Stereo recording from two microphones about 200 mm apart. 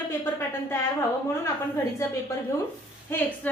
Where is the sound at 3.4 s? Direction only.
10° left (ahead or behind).